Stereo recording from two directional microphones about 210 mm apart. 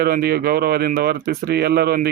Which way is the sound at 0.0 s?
50° right (ahead or behind).